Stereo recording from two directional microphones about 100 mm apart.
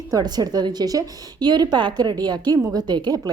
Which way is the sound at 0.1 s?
40° right (ahead or behind).